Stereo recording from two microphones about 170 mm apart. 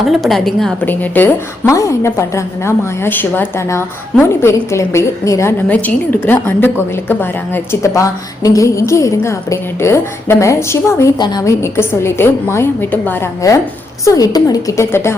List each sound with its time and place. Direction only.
0.0 s a woman's voice: centre (ahead or behind); by 15.1 s 15° left (ahead or behind)